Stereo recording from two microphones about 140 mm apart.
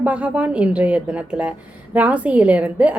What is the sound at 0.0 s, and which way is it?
A woman's voice, 10° right (ahead or behind).